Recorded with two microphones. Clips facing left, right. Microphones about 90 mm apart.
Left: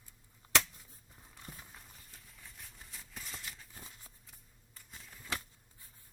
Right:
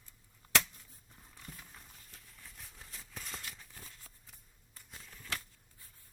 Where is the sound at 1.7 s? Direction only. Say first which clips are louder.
Even; centre (ahead or behind).